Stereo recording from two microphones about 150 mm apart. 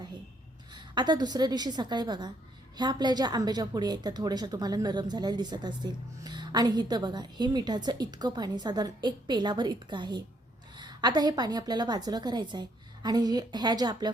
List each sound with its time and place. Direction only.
0.7 s a woman's voice: 30° right (ahead or behind)